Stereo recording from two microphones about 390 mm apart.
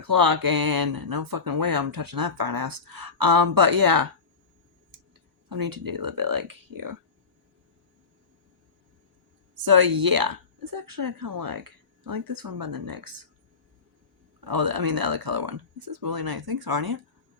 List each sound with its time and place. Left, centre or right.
0.0 s speech: right
5.5 s speech: right
9.6 s speech: right
14.4 s speech: right